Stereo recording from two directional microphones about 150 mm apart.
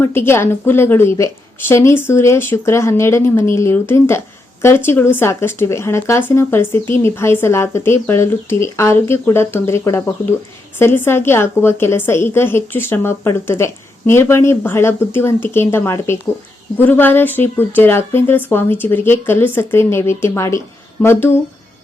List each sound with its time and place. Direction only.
0.0 s speech: 15° left (ahead or behind)